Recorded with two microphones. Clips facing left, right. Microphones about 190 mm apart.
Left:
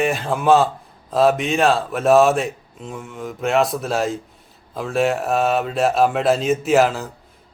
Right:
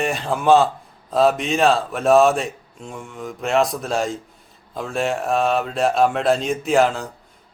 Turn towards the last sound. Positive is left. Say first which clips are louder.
# left 1 dB
turn(degrees=5)  # may be behind; listen again after turning